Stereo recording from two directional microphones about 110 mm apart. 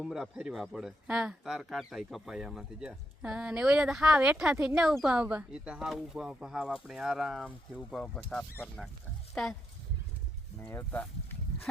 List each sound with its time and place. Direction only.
0.0 s speech: 5° right (ahead or behind)
7.8 s speech: 10° left (ahead or behind)
10.6 s speech: 20° left (ahead or behind)